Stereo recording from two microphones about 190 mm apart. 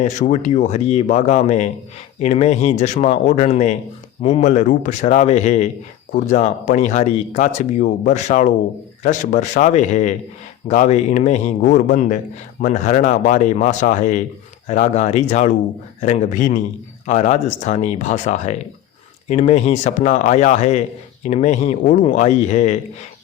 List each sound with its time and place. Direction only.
0.0 s speech: 40° left (ahead or behind)